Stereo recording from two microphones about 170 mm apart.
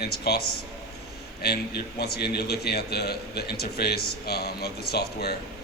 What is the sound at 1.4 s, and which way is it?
Speech, 70° left (ahead or behind).